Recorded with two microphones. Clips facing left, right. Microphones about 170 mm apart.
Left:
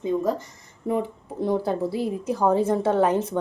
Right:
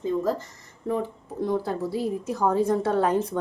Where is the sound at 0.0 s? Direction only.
20° left (ahead or behind).